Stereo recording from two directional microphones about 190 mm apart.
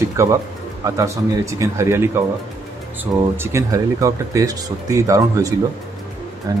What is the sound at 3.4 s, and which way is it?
Speech, 15° right (ahead or behind).